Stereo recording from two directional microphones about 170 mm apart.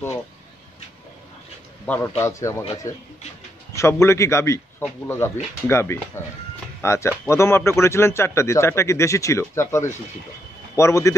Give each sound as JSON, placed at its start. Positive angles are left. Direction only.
{"t": 1.9, "sound": "a man's voice", "side_deg": 15}
{"t": 3.7, "sound": "a man's voice", "side_deg": 15}